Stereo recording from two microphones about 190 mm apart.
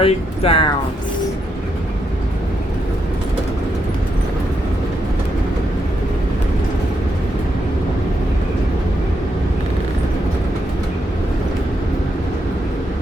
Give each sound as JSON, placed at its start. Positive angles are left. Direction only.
{"t": 0.0, "sound": "speech", "side_deg": 30}